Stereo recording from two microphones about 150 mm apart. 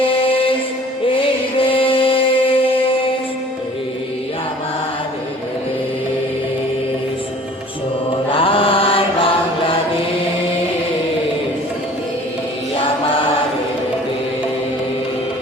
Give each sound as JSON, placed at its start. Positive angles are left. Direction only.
{"t": 0.0, "sound": "music", "side_deg": 35}
{"t": 8.3, "sound": "mantra", "side_deg": 35}